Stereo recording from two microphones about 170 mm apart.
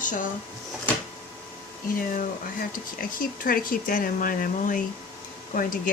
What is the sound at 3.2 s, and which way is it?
Speech, 55° left (ahead or behind).